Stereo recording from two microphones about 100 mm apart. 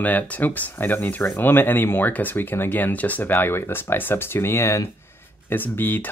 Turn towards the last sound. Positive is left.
turn(degrees=20)  # may be behind; listen again after turning